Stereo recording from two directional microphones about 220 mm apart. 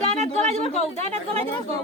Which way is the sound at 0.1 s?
30° right (ahead or behind).